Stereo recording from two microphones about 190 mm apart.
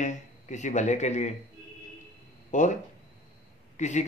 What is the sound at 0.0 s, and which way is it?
A man's voice, 40° left (ahead or behind).